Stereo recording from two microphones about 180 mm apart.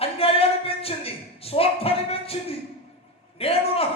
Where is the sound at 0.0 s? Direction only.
30° left (ahead or behind).